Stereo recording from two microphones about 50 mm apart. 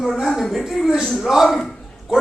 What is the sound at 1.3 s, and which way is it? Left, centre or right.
Speech, centre.